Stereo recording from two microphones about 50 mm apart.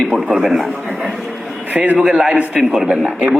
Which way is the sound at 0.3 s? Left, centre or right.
Right.